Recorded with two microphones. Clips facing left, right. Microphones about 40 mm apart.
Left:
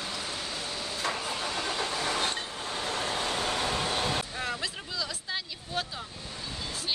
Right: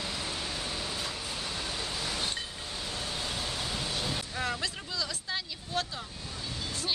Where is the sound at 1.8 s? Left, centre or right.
Left.